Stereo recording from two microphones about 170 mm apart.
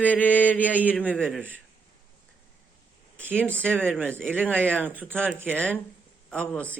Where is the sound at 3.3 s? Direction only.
10° left (ahead or behind).